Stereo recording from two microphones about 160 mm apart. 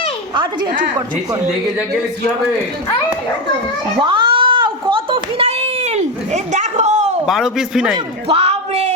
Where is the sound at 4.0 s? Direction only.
30° right (ahead or behind).